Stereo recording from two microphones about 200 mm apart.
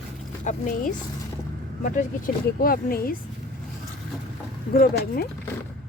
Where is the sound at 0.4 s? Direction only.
40° left (ahead or behind).